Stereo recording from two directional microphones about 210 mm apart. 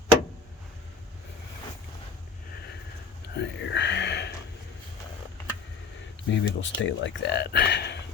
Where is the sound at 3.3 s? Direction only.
55° left (ahead or behind).